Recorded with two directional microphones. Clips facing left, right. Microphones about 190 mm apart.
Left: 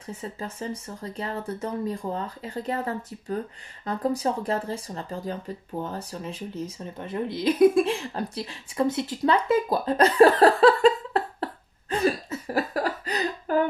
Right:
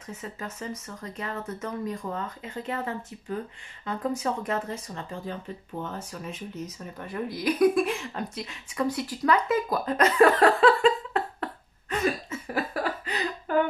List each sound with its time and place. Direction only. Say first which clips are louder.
0.0 s speech: left 3 dB; 30° left (ahead or behind)